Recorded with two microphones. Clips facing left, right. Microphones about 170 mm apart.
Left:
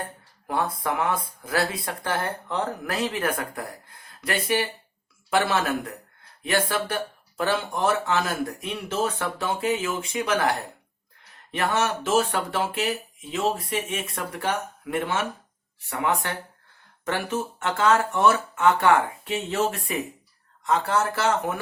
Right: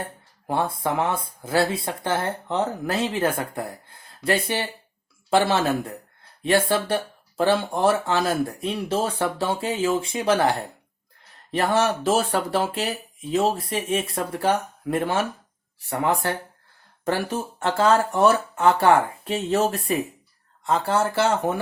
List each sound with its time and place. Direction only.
0.4 s speech: 30° right (ahead or behind)
11.5 s speech: 35° right (ahead or behind)